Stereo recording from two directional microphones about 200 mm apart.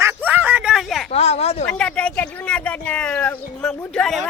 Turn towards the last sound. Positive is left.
turn(degrees=5)  # may be behind; listen again after turning